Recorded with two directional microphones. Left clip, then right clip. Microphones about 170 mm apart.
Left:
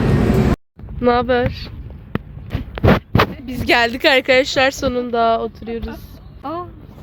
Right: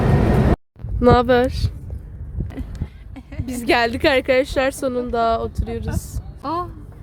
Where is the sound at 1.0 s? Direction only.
30° right (ahead or behind).